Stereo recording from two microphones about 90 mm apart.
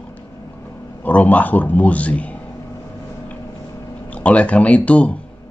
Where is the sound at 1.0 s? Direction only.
15° left (ahead or behind).